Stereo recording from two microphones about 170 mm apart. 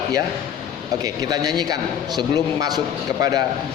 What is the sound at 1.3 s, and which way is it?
Mantra, 25° right (ahead or behind).